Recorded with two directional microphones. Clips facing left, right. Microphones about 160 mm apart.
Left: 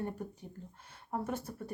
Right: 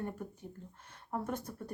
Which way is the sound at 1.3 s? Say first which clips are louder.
Left 1 dB; 10° left (ahead or behind).